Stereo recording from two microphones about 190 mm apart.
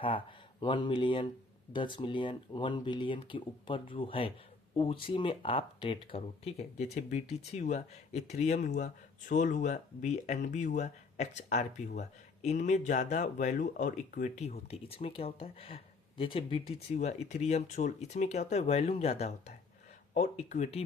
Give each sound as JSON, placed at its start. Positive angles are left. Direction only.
{"t": 0.0, "sound": "speech", "side_deg": 25}